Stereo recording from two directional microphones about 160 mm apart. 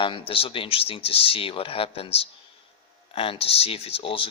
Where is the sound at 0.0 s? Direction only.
35° left (ahead or behind).